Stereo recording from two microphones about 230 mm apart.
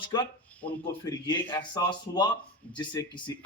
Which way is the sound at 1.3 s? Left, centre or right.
Centre.